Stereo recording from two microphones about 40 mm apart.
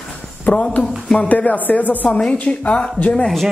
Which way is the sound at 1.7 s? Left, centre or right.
Left.